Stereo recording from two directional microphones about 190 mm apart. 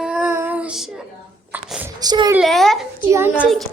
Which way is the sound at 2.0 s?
20° right (ahead or behind).